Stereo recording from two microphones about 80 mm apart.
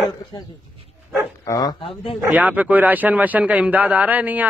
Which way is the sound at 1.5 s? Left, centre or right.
Left.